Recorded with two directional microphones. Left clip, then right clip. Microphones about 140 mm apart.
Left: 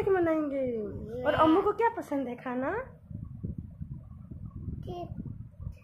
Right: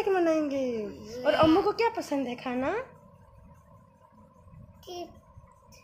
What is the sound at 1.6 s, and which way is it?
A woman's voice, 15° right (ahead or behind).